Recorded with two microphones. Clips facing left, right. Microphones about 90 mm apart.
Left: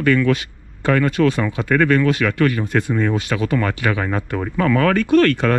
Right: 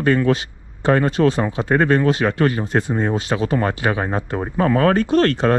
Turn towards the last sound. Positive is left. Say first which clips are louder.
# left 1 dB
turn(degrees=-25)  # may be behind; listen again after turning